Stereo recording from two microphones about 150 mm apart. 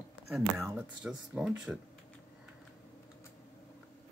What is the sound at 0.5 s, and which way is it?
Speech, 15° right (ahead or behind).